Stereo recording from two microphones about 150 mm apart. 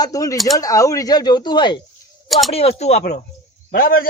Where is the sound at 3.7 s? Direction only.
70° left (ahead or behind).